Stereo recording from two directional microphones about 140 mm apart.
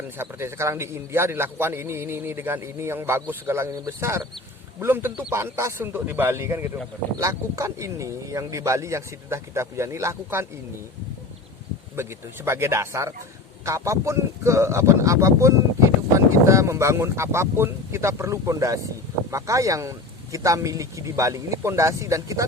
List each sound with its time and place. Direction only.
0.2 s a man's voice: 15° right (ahead or behind)
12.5 s speech: 20° right (ahead or behind)